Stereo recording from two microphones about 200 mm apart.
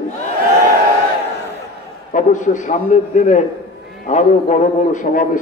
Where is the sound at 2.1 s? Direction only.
40° left (ahead or behind).